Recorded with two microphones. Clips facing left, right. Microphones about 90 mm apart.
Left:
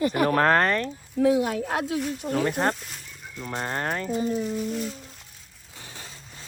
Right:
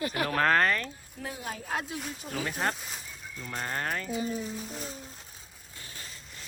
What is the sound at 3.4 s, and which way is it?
Speech, 35° left (ahead or behind).